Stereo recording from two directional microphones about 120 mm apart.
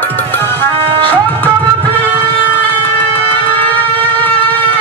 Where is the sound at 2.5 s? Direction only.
15° left (ahead or behind).